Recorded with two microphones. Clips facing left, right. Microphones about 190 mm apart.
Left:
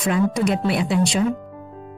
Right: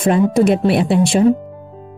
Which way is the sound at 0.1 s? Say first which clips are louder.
Right 6 dB; 25° right (ahead or behind).